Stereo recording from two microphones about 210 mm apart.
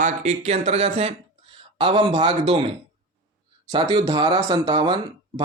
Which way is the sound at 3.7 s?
25° right (ahead or behind).